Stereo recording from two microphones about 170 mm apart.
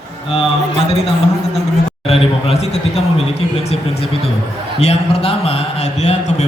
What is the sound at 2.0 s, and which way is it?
A man's voice, 35° left (ahead or behind).